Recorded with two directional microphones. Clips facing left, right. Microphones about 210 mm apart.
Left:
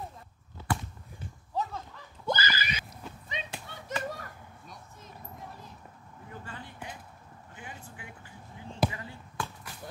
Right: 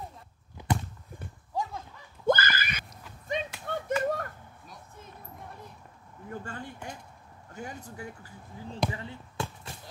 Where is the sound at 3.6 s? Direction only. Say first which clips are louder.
Right 12 dB; 50° right (ahead or behind).